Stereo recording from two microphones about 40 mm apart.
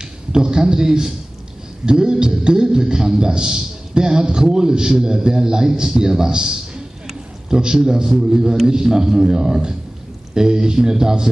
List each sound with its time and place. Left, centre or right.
0.3 s a man's voice: centre